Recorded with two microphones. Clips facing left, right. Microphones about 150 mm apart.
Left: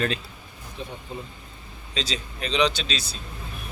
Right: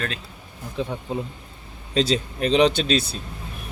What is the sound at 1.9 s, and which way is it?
Speech, 55° right (ahead or behind).